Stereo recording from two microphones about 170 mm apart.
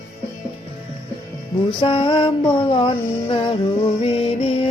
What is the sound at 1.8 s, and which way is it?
Music, 30° left (ahead or behind).